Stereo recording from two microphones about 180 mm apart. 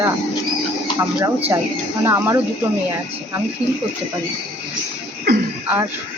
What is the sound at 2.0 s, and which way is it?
Speech, 15° right (ahead or behind).